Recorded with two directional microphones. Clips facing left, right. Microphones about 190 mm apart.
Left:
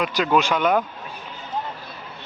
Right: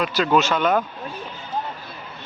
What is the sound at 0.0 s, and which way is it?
Speech, 15° left (ahead or behind).